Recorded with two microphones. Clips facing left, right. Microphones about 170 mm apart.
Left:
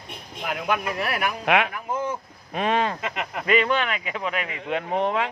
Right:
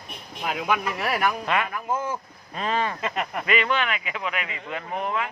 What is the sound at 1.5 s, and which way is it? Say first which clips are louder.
Speech: left 3 dB; 75° left (ahead or behind).